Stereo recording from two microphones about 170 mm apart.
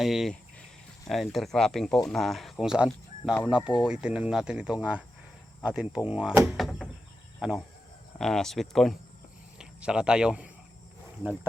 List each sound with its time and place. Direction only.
0.0 s speech: centre (ahead or behind)